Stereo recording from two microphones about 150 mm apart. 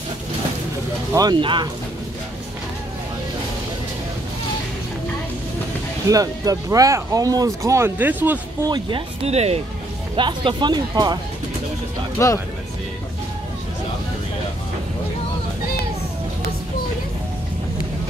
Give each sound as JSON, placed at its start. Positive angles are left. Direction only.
{"t": 1.1, "sound": "speech", "side_deg": -30}
{"t": 6.0, "sound": "speech", "side_deg": -25}
{"t": 8.6, "sound": "speech", "side_deg": -30}
{"t": 9.2, "sound": "speech", "side_deg": -45}
{"t": 10.1, "sound": "speech", "side_deg": -30}
{"t": 12.2, "sound": "speech", "side_deg": 20}